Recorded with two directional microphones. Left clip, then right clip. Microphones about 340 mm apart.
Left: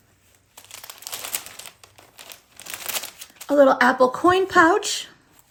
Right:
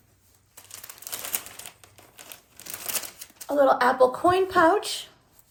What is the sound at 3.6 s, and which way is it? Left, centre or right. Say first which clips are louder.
Speech: left 3 dB; left.